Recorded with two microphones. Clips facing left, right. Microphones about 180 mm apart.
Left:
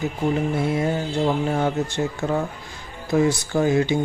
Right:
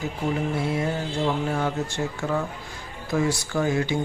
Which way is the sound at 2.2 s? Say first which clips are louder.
Left 2 dB; 40° left (ahead or behind).